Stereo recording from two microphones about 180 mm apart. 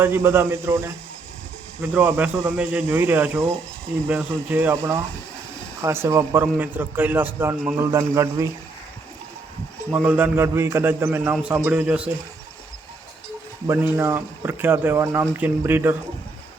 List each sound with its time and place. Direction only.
0.0 s a man's voice: 15° right (ahead or behind)
9.9 s a man's voice: 10° right (ahead or behind)
13.7 s a man's voice: 15° right (ahead or behind)